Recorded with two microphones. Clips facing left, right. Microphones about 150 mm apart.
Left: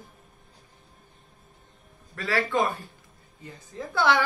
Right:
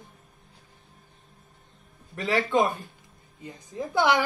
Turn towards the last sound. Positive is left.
turn(degrees=-20)  # may be behind; listen again after turning